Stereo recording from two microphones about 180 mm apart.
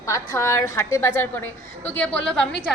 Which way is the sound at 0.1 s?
15° left (ahead or behind).